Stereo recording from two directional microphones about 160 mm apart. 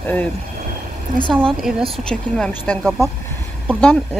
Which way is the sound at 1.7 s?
Centre (ahead or behind).